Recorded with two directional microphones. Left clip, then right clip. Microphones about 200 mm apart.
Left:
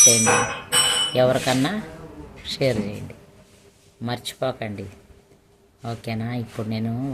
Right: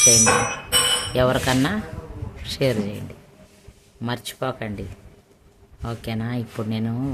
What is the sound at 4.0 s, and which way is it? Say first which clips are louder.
Speech: left 1 dB; 15° right (ahead or behind).